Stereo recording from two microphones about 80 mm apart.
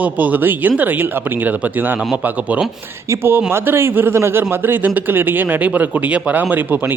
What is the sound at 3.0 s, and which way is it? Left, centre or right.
A man's voice, right.